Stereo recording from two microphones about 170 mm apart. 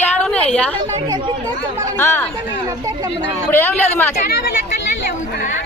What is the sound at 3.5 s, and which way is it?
Speech, 10° left (ahead or behind).